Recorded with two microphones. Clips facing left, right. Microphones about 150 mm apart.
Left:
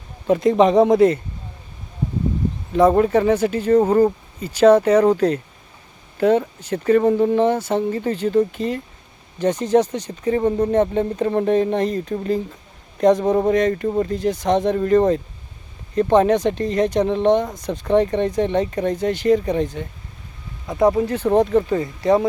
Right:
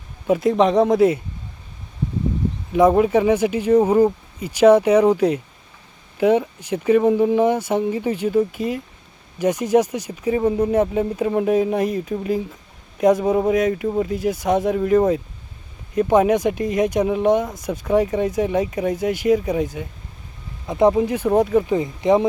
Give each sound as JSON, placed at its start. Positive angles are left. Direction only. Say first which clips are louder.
{"t": 0.3, "sound": "speech", "louder": "left 2 dB", "side_deg": -5}
{"t": 2.7, "sound": "speech", "louder": "even", "side_deg": -10}
{"t": 20.7, "sound": "speech", "louder": "right 1 dB", "side_deg": -20}